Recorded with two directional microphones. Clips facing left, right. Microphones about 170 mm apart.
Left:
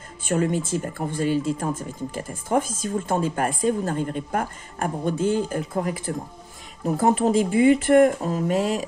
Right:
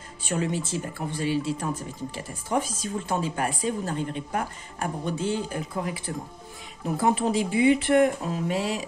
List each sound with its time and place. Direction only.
0.2 s speech: 50° left (ahead or behind)